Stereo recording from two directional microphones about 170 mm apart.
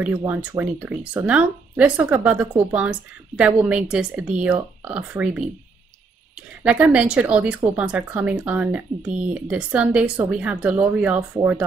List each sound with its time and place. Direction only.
0.3 s speech: 10° right (ahead or behind)
6.6 s speech: 10° right (ahead or behind)